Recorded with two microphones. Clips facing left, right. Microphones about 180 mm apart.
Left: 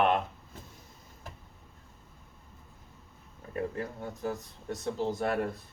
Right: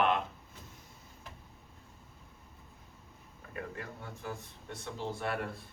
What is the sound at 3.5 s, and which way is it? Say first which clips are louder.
Speech: left 8 dB; 40° left (ahead or behind).